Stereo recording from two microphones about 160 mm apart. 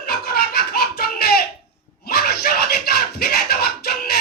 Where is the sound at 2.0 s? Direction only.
75° left (ahead or behind).